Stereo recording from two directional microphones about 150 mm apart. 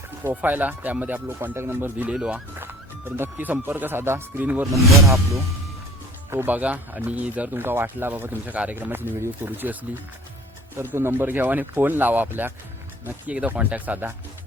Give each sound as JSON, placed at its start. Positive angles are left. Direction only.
{"t": 0.3, "sound": "speech", "side_deg": -10}
{"t": 4.6, "sound": "speech", "side_deg": 0}
{"t": 5.0, "sound": "speech", "side_deg": -20}